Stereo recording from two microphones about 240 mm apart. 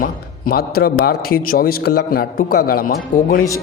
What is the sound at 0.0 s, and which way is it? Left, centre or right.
A man's voice, left.